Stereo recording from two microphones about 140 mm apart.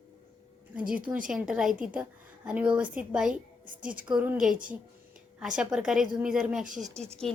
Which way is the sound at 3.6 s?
75° right (ahead or behind).